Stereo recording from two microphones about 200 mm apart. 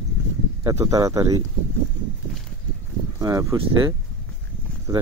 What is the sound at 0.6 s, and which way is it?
Speech, 15° right (ahead or behind).